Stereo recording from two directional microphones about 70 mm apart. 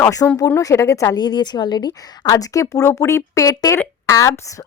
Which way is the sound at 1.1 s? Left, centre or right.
Left.